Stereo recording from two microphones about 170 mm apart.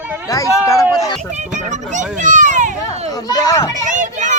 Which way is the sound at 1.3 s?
45° right (ahead or behind).